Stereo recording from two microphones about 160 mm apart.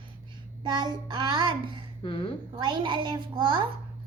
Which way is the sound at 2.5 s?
30° right (ahead or behind).